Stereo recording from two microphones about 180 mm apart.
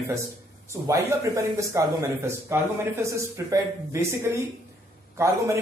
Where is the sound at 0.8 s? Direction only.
15° right (ahead or behind).